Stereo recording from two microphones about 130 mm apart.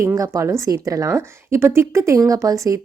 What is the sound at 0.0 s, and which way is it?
Speech, 25° right (ahead or behind).